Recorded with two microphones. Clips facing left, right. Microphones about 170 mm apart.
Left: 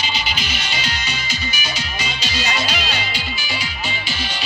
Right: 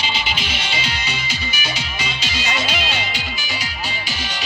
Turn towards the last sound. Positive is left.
turn(degrees=-25)  # may be behind; listen again after turning